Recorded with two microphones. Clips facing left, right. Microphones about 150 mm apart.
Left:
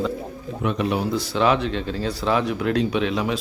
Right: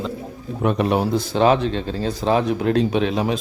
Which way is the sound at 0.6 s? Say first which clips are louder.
Right 4 dB; 50° right (ahead or behind).